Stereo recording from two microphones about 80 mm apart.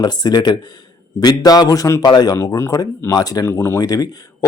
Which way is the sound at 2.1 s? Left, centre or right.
Left.